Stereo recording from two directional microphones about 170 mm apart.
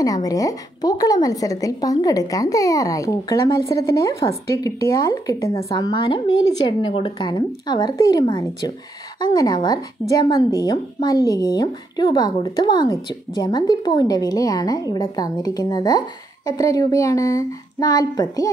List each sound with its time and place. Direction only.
0.0 s a woman's voice: 20° left (ahead or behind)